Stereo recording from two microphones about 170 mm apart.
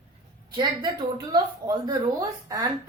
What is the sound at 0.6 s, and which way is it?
Speech, 25° right (ahead or behind).